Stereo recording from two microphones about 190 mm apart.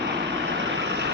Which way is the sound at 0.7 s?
70° right (ahead or behind).